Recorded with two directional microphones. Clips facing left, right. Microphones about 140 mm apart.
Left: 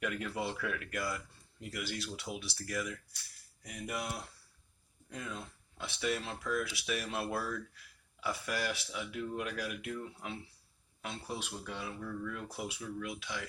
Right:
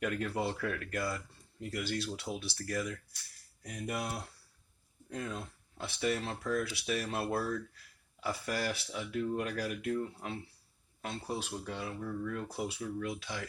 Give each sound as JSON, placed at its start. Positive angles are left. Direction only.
{"t": 0.0, "sound": "speech", "side_deg": -40}